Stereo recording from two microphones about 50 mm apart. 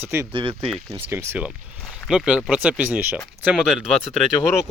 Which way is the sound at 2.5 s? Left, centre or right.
Right.